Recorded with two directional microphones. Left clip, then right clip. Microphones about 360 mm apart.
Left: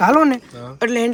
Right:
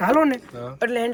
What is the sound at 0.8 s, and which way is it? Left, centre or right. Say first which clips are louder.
Speech: left 4 dB; centre.